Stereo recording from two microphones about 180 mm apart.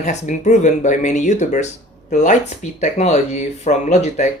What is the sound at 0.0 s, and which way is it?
Speech, 40° left (ahead or behind).